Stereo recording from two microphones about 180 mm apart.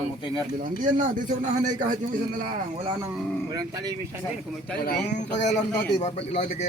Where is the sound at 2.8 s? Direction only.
25° right (ahead or behind).